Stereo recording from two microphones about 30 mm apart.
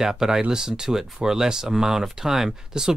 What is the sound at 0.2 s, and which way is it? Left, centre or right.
Speech, right.